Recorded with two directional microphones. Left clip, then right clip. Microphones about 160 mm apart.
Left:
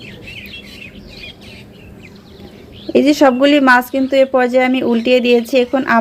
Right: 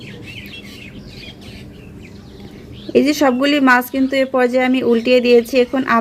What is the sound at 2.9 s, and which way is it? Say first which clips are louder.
Speech: left 3 dB; 40° left (ahead or behind).